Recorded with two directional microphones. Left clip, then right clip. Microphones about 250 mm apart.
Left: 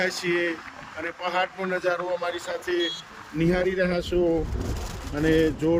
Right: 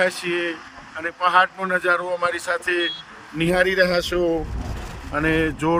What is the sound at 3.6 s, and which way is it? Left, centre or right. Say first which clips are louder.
Speech: right 7 dB; right.